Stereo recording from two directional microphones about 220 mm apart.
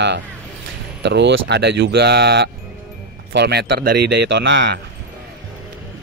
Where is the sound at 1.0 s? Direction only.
50° right (ahead or behind).